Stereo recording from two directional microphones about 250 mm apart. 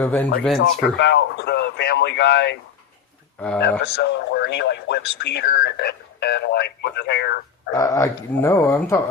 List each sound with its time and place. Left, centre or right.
0.0 s speech: centre
0.6 s speech: left
3.6 s speech: left
7.7 s speech: centre